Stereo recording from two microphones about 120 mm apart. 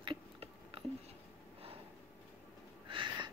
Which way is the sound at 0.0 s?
45° right (ahead or behind).